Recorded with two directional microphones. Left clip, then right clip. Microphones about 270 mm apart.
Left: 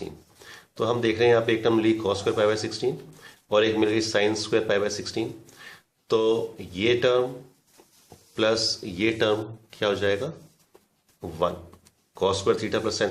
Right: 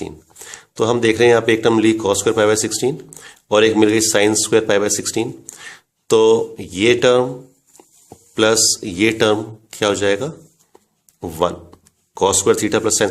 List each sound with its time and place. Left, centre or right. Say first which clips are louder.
0.0 s speech: right 8 dB; right
8.4 s speech: right 9 dB; right